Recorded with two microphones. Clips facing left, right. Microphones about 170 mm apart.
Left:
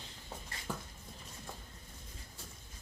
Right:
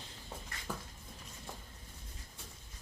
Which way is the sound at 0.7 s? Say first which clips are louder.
Left 1 dB; 10° left (ahead or behind).